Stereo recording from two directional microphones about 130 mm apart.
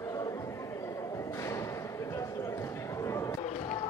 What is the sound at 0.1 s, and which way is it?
Chatter, 30° left (ahead or behind).